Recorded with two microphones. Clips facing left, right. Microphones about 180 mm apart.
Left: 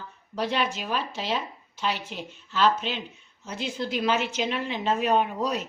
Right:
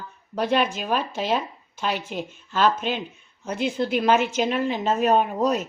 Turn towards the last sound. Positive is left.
turn(degrees=-45)  # may be behind; listen again after turning